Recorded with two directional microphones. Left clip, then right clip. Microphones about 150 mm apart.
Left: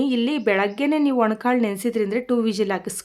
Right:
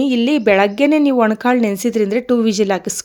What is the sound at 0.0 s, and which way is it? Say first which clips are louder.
A woman's voice: right 7 dB; 30° right (ahead or behind).